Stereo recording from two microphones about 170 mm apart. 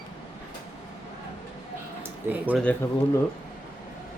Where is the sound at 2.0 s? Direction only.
10° right (ahead or behind).